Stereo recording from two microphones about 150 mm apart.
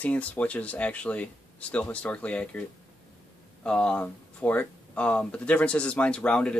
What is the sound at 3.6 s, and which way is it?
Speech, 5° left (ahead or behind).